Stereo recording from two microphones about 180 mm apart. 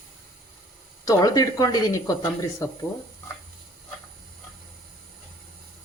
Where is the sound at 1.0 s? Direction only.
20° left (ahead or behind).